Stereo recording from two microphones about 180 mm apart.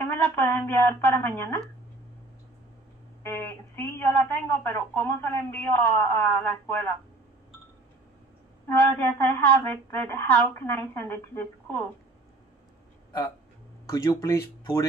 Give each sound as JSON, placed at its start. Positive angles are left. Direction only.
{"t": 0.2, "sound": "a woman's voice", "side_deg": 10}
{"t": 3.3, "sound": "a woman's voice", "side_deg": 10}
{"t": 8.6, "sound": "a woman's voice", "side_deg": 10}
{"t": 13.8, "sound": "speech", "side_deg": 20}